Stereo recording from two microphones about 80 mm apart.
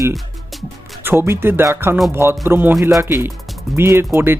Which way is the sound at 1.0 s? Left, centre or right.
Right.